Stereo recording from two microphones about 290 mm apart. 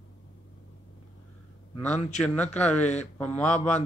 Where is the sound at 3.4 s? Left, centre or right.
Left.